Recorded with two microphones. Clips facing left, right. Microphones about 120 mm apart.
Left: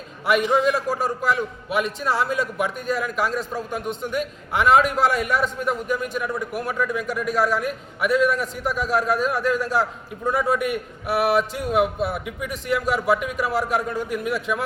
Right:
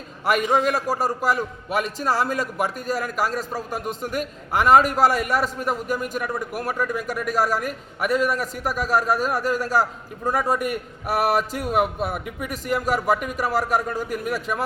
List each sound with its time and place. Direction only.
0.9 s a man's voice: 40° right (ahead or behind)